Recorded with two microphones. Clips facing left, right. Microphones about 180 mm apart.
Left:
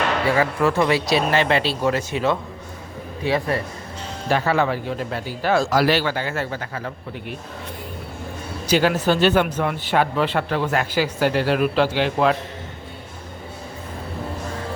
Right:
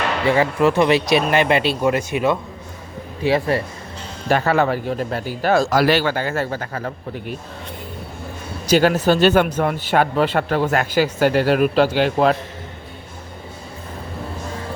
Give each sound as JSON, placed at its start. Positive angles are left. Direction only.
{"t": 0.3, "sound": "speech", "side_deg": -20}
{"t": 3.2, "sound": "a man's voice", "side_deg": -35}
{"t": 4.3, "sound": "speech", "side_deg": -50}
{"t": 8.6, "sound": "speech", "side_deg": -40}